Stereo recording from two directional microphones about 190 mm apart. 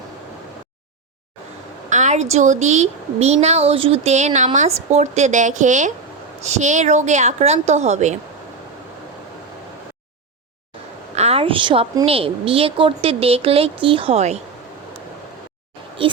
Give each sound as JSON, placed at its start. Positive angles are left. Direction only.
{"t": 1.9, "sound": "a sound", "side_deg": -40}
{"t": 2.3, "sound": "a woman's voice", "side_deg": -40}
{"t": 11.2, "sound": "a woman's voice", "side_deg": -30}
{"t": 16.0, "sound": "speech", "side_deg": -25}